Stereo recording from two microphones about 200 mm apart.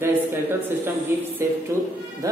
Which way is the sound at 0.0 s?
10° right (ahead or behind).